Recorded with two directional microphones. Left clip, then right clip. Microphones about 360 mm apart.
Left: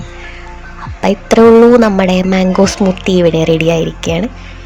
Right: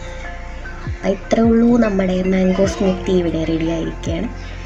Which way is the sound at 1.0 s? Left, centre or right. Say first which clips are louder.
Left 9 dB; left.